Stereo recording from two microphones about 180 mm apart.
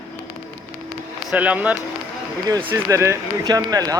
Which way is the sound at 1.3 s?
10° right (ahead or behind).